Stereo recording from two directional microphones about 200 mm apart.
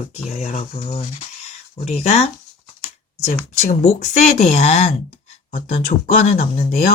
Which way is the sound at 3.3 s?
35° left (ahead or behind).